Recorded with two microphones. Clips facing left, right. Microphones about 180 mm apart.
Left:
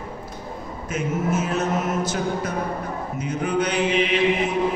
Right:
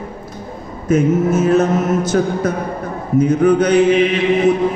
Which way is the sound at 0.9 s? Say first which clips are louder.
Right 10 dB; 40° right (ahead or behind).